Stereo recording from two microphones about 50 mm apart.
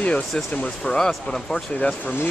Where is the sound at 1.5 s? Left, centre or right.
Left.